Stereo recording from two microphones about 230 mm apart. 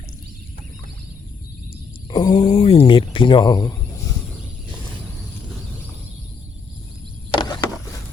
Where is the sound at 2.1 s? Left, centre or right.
Centre.